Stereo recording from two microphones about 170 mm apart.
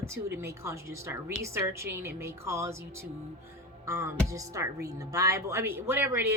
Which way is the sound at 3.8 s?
15° right (ahead or behind).